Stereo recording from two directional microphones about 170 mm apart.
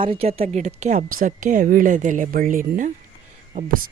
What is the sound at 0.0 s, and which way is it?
A woman's voice, 35° right (ahead or behind).